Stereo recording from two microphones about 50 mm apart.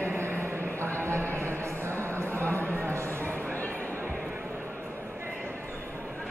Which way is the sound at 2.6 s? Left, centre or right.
Left.